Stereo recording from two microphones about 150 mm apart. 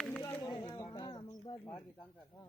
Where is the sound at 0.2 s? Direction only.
20° left (ahead or behind).